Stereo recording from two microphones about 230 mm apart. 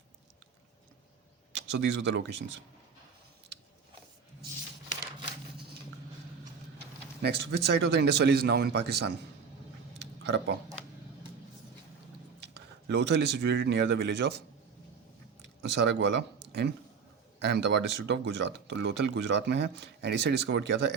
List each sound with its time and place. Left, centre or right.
1.5 s speech: right
7.2 s speech: right
10.2 s speech: right
12.9 s speech: right
15.7 s speech: right